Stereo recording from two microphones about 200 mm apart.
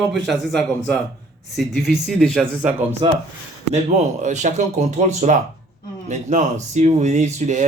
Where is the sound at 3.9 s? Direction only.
35° right (ahead or behind).